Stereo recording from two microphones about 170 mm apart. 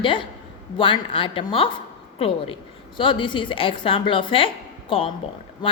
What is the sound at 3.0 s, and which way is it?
A woman's voice, 30° left (ahead or behind).